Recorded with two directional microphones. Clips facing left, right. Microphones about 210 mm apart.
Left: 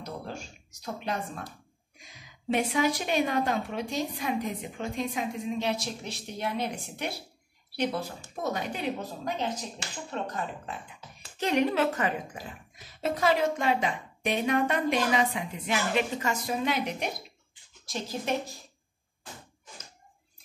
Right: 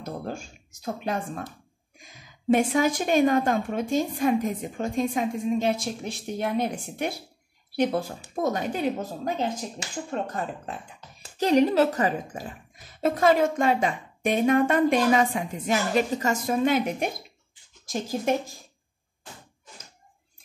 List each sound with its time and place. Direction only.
0.0 s a woman's voice: 50° right (ahead or behind)